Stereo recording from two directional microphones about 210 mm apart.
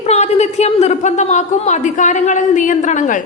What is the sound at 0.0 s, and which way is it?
A woman's voice, 30° left (ahead or behind).